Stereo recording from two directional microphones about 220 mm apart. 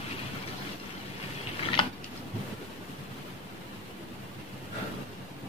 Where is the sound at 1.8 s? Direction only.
20° left (ahead or behind).